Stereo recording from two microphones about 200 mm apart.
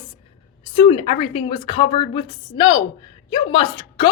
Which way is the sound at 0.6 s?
25° left (ahead or behind).